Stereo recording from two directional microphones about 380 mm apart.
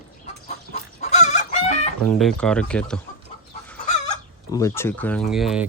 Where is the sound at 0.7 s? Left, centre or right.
Centre.